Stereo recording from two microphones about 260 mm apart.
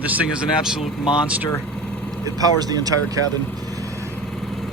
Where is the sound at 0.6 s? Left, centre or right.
Centre.